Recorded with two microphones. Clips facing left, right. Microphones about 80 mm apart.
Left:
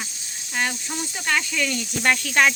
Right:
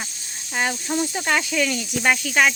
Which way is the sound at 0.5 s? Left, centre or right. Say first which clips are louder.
Right 3 dB; centre.